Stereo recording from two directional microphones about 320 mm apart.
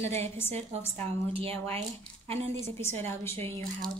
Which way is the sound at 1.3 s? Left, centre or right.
Centre.